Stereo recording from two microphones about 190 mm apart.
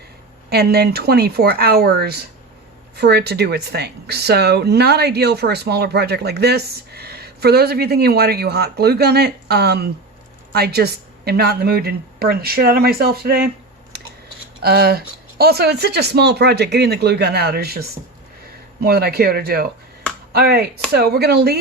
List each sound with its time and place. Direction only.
0.5 s speech: 55° right (ahead or behind)
14.6 s speech: 55° right (ahead or behind)